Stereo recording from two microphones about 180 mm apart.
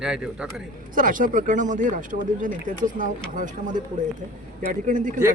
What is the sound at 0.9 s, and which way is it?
Speech, 50° right (ahead or behind).